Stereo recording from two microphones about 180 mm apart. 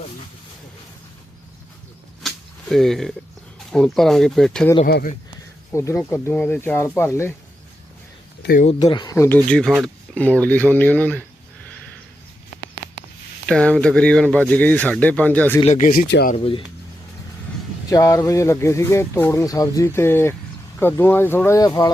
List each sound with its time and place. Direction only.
2.2 s a sound: centre (ahead or behind)
3.7 s speech: centre (ahead or behind)
5.7 s speech: 15° left (ahead or behind)
8.4 s a sound: 60° left (ahead or behind)
8.8 s speech: 25° left (ahead or behind)
13.5 s speech: 5° left (ahead or behind)
15.6 s speech: 45° left (ahead or behind); by 16.3 s 60° left (ahead or behind)
16.3 s speech: 30° left (ahead or behind)
17.8 s speech: 20° left (ahead or behind)